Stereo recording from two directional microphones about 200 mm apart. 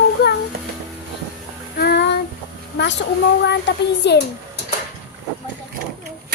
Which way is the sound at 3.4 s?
60° left (ahead or behind).